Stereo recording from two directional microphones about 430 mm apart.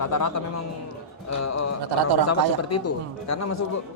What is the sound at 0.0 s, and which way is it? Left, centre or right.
Speech, left.